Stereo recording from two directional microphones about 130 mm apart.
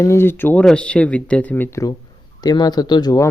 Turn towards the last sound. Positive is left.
turn(degrees=30)  # may be behind; listen again after turning